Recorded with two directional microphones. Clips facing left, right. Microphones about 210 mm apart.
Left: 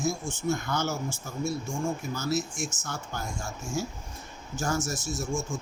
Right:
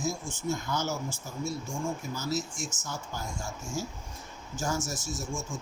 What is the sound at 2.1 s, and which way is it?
Speech, 65° left (ahead or behind).